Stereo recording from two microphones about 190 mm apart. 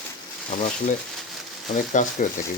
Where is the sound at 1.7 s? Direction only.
40° left (ahead or behind).